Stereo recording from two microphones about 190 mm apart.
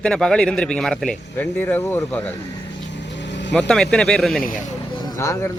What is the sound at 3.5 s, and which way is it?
Speech, 5° left (ahead or behind).